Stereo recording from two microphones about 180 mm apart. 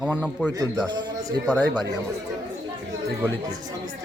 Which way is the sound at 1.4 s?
10° left (ahead or behind).